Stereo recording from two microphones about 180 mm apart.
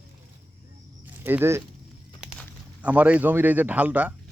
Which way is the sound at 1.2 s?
10° right (ahead or behind).